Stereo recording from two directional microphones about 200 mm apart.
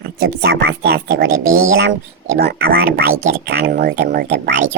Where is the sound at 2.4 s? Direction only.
50° right (ahead or behind).